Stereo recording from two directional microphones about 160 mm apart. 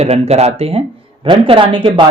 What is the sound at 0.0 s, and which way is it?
Speech, 40° right (ahead or behind).